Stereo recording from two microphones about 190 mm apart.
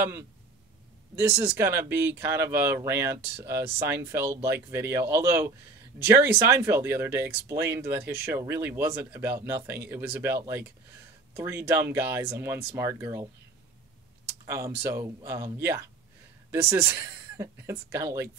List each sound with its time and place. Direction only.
1.1 s speech: 10° right (ahead or behind)
14.4 s a sound: 15° right (ahead or behind)
14.8 s speech: 10° right (ahead or behind)